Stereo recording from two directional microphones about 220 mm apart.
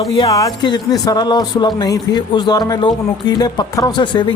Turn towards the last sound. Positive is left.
turn(degrees=20)  # may be behind; listen again after turning